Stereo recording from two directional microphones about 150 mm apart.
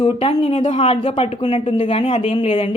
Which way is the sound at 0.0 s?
40° left (ahead or behind).